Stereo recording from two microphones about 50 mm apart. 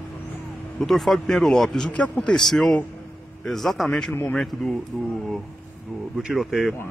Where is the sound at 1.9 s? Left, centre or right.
Left.